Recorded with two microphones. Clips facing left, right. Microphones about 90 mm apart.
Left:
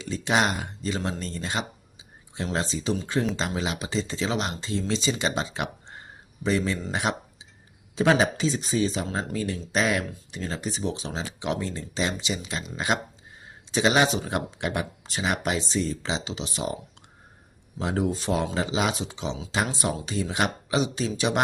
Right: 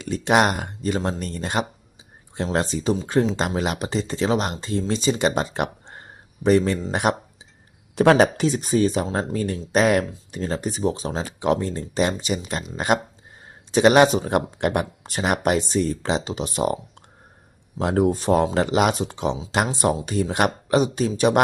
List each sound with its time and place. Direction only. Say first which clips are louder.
0.0 s speech: right 5 dB; 55° right (ahead or behind)
17.7 s speech: right 6 dB; 55° right (ahead or behind)